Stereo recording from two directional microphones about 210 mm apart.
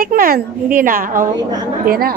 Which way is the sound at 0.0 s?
45° right (ahead or behind).